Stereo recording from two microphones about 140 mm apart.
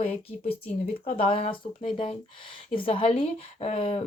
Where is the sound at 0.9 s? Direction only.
40° left (ahead or behind).